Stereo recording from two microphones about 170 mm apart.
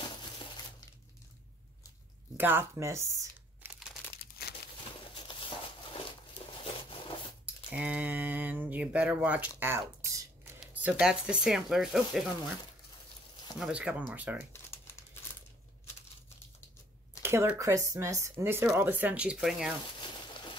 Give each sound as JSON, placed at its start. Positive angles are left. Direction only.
{"t": 2.3, "sound": "speech", "side_deg": -10}
{"t": 5.1, "sound": "crumpling", "side_deg": 30}
{"t": 6.6, "sound": "a sound", "side_deg": 30}
{"t": 7.7, "sound": "speech", "side_deg": -5}
{"t": 9.6, "sound": "a sound", "side_deg": -15}
{"t": 10.6, "sound": "speech", "side_deg": -10}
{"t": 13.6, "sound": "speech", "side_deg": -5}
{"t": 14.5, "sound": "crumpling", "side_deg": 15}
{"t": 17.2, "sound": "speech", "side_deg": -15}